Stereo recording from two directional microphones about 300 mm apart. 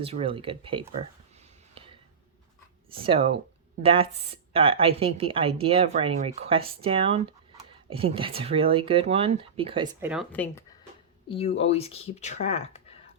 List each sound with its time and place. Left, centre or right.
0.0 s speech: centre
1.4 s a sound: centre
3.0 s a woman's voice: centre
10.1 s speech: centre
11.3 s speech: centre